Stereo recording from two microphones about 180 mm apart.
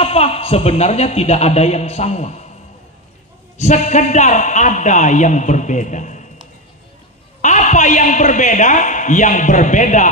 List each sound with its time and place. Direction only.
0.0 s a man's voice: 35° left (ahead or behind)
3.5 s a man's voice: 40° left (ahead or behind)
7.4 s a man's voice: 40° left (ahead or behind)